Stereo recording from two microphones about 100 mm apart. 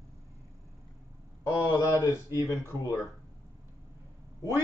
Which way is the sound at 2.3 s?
35° left (ahead or behind).